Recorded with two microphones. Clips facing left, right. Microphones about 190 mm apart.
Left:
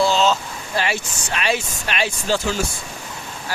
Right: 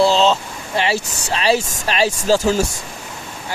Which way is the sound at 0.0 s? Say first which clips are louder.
Right 3 dB; 30° right (ahead or behind).